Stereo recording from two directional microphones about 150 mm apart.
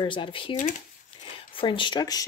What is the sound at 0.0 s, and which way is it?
Speech, 35° left (ahead or behind).